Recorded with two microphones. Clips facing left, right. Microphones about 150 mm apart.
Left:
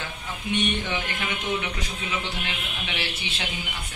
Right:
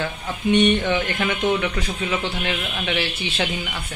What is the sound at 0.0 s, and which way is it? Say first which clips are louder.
Speech: right 9 dB; 75° right (ahead or behind).